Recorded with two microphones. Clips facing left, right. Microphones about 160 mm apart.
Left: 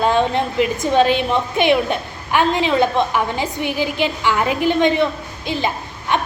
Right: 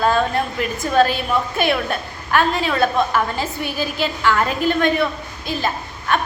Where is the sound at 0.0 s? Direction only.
20° left (ahead or behind).